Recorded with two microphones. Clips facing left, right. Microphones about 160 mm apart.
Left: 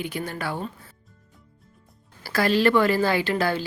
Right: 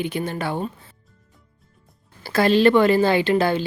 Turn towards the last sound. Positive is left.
turn(degrees=-20)  # may be behind; listen again after turning